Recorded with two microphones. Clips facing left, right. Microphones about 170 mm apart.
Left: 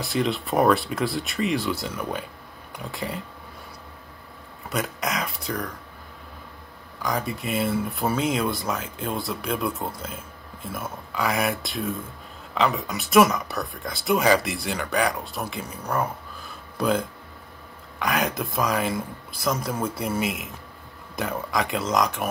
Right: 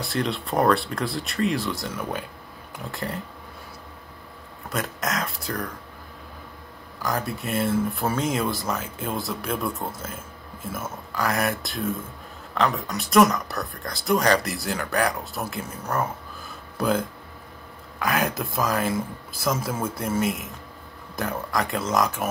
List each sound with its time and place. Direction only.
0.0 s speech: centre (ahead or behind)
4.6 s speech: centre (ahead or behind)
7.0 s speech: centre (ahead or behind)
16.7 s speech: centre (ahead or behind)